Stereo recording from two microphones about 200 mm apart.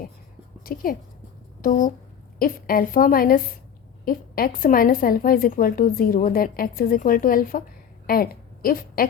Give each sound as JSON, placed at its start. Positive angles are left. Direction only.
{"t": 0.6, "sound": "a woman's voice", "side_deg": 45}